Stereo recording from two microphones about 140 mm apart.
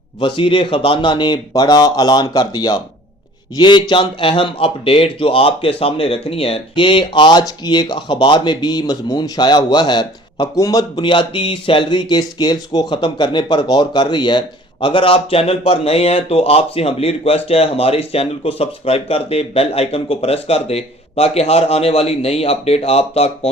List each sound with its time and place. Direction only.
0.2 s a man's voice: 35° left (ahead or behind)